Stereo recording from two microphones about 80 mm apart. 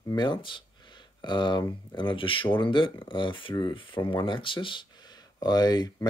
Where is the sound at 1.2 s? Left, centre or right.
Left.